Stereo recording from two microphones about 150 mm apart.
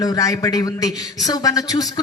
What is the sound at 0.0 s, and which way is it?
A man's voice, 25° left (ahead or behind).